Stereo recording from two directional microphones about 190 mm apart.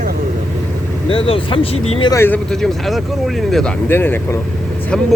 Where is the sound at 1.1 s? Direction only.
30° left (ahead or behind).